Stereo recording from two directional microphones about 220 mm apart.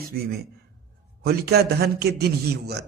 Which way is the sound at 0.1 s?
45° right (ahead or behind).